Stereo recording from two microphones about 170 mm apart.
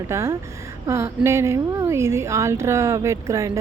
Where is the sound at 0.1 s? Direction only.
15° right (ahead or behind).